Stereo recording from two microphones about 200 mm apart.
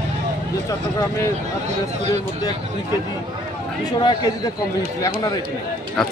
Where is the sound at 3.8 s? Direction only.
20° left (ahead or behind).